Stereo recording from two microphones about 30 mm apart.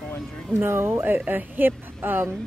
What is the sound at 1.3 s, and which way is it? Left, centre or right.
Speech, right.